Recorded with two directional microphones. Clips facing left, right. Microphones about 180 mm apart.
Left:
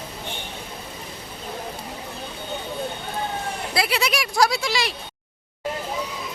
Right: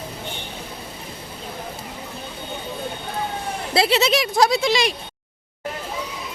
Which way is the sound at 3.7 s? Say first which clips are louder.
Right 6 dB; 25° right (ahead or behind).